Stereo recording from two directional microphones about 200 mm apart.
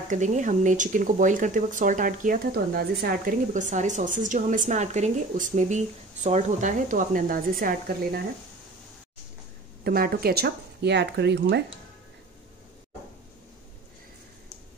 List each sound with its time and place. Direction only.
0.1 s speech: 40° right (ahead or behind)
9.8 s speech: 50° right (ahead or behind)